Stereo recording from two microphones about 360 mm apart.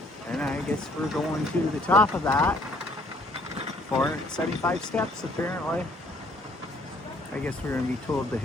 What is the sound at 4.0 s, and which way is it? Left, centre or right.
Speech, centre.